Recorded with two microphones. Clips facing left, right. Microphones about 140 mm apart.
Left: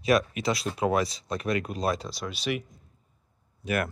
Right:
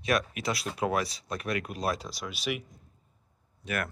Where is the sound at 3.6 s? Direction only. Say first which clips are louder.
Left 5 dB; 5° left (ahead or behind).